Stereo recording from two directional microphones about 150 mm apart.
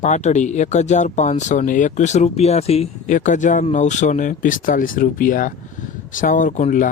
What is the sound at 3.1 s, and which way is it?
Speech, 55° left (ahead or behind).